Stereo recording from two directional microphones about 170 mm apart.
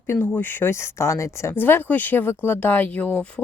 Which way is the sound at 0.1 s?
10° left (ahead or behind).